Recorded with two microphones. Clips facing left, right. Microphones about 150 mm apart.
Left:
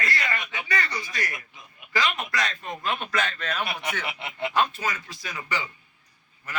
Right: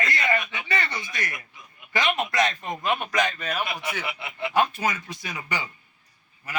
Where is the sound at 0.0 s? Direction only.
20° right (ahead or behind).